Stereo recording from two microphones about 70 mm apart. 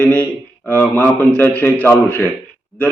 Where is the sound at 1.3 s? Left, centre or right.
Left.